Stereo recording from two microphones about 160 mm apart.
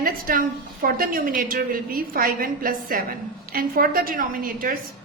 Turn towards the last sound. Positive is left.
turn(degrees=-60)  # may be behind; listen again after turning